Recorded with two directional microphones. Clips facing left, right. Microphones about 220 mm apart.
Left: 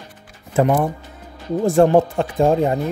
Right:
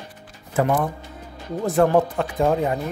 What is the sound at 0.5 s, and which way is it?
Speech, 25° left (ahead or behind).